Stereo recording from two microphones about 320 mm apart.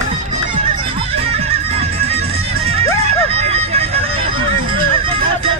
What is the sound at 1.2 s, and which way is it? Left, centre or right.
Music, centre.